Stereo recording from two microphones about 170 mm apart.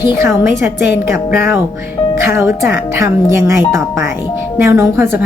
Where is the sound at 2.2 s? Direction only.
15° right (ahead or behind).